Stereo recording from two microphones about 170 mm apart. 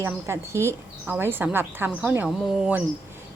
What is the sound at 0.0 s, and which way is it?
A woman's voice, 15° right (ahead or behind).